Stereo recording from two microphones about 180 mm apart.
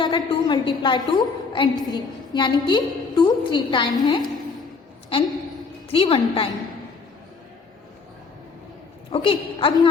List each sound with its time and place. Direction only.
0.0 s a woman's voice: 25° left (ahead or behind)
5.9 s a woman's voice: 30° left (ahead or behind)
9.1 s a woman's voice: 30° left (ahead or behind)